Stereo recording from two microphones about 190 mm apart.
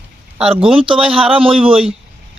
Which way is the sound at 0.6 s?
30° right (ahead or behind).